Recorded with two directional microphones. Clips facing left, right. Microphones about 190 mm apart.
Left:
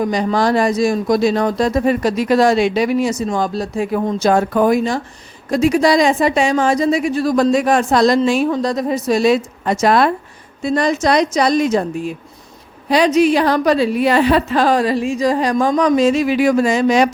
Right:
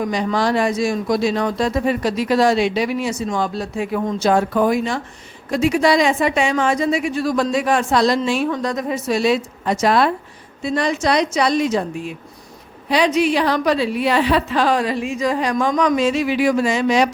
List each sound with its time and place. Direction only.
0.0 s a woman's voice: 40° left (ahead or behind)